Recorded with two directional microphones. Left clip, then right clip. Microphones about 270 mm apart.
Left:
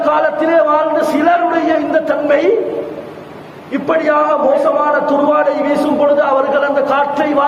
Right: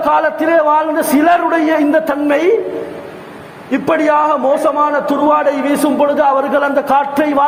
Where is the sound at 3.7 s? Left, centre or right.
Right.